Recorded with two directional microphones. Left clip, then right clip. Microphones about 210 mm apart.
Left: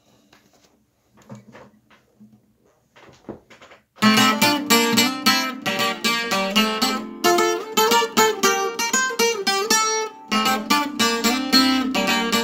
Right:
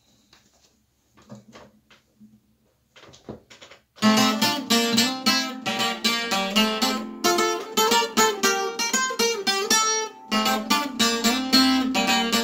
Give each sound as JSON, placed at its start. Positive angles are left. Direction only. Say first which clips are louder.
{"t": 4.0, "sound": "music", "louder": "left 4 dB", "side_deg": 40}